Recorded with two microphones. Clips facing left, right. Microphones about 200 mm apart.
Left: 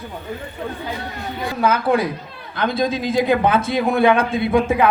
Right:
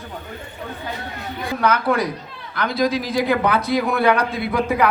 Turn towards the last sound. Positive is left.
turn(degrees=25)  # may be behind; listen again after turning